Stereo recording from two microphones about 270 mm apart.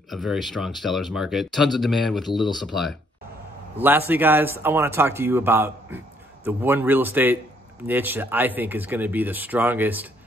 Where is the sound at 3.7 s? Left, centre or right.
Centre.